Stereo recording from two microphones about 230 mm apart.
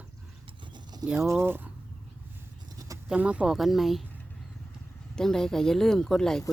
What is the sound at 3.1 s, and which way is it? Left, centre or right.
Speech, centre.